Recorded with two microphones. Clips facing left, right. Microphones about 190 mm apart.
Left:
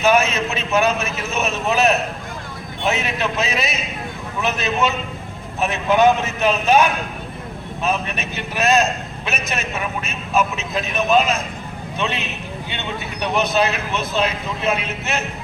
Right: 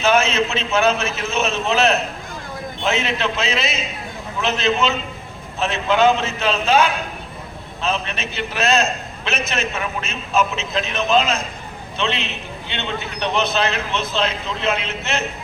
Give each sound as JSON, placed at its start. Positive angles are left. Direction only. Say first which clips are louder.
{"t": 0.0, "sound": "a man's voice", "louder": "even", "side_deg": 15}